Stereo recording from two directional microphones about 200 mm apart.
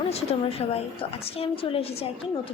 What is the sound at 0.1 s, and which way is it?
A woman's voice, 30° left (ahead or behind).